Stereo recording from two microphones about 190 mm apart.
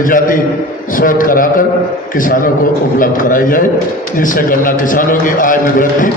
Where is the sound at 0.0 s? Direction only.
45° left (ahead or behind).